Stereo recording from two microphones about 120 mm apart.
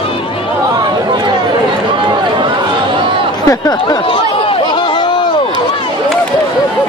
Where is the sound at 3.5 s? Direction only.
30° left (ahead or behind).